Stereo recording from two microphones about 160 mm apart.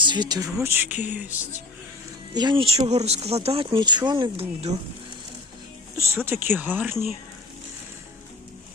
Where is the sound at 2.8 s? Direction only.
45° right (ahead or behind); by 4.4 s 30° right (ahead or behind).